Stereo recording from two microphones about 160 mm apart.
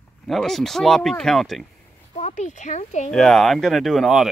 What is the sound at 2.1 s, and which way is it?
Speech, 45° left (ahead or behind).